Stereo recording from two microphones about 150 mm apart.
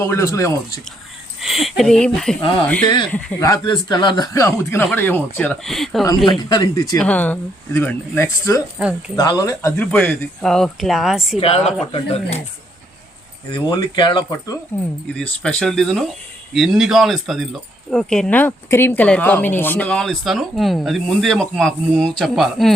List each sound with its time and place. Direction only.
0.0 s speech: 15° left (ahead or behind)
1.4 s speech: centre (ahead or behind)
3.3 s speech: 25° left (ahead or behind); by 6.1 s centre (ahead or behind)
6.4 s speech: 25° left (ahead or behind)
7.0 s speech: 10° left (ahead or behind)
11.3 s speech: 45° left (ahead or behind)
13.5 s speech: 30° left (ahead or behind)
14.3 s speech: 20° left (ahead or behind)
15.0 s speech: 10° left (ahead or behind)